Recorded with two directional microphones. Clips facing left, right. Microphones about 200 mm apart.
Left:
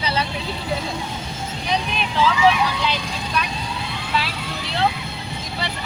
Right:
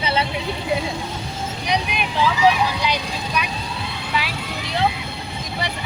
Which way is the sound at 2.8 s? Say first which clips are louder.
Right 1 dB; 15° right (ahead or behind).